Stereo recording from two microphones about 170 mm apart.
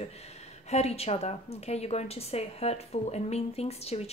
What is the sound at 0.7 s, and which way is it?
A woman's voice, 40° left (ahead or behind).